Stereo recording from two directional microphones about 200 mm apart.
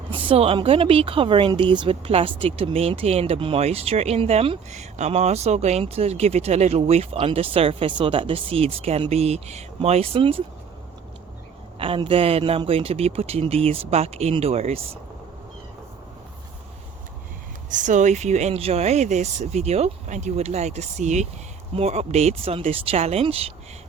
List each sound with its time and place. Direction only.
0.1 s speech: 25° right (ahead or behind)
11.8 s speech: 25° right (ahead or behind)
17.7 s speech: 40° right (ahead or behind)